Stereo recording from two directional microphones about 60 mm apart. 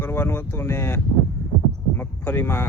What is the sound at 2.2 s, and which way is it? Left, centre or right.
Speech, left.